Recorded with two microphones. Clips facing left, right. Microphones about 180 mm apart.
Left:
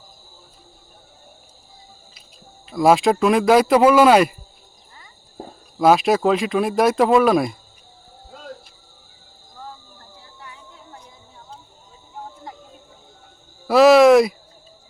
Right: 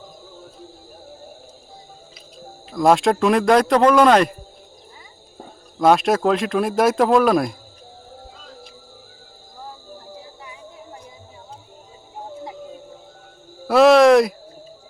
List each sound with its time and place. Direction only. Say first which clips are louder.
2.7 s speech: left 1 dB; 5° left (ahead or behind)
5.4 s speech: even; centre (ahead or behind)
13.7 s a sound: left 1 dB; centre (ahead or behind)